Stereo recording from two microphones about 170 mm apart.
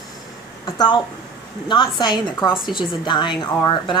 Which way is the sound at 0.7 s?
25° left (ahead or behind).